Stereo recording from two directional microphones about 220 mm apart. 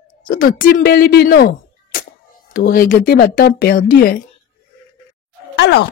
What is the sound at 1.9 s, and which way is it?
Music, 40° left (ahead or behind).